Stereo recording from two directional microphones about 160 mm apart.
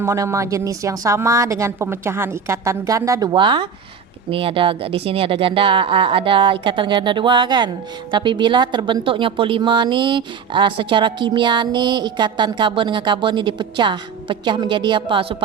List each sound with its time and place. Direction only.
0.0 s speech: 15° right (ahead or behind); by 15.4 s 35° right (ahead or behind)